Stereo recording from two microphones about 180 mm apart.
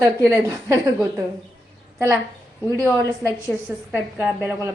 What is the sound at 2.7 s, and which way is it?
Speech, 15° left (ahead or behind).